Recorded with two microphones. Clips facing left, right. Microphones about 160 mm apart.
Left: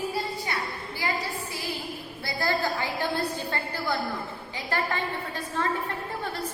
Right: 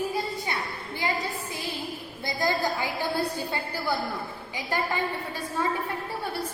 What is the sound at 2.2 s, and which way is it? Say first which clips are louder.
A woman's voice: right 1 dB; 15° right (ahead or behind).